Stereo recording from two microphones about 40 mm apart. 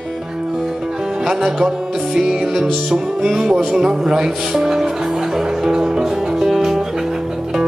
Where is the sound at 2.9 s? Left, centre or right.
Centre.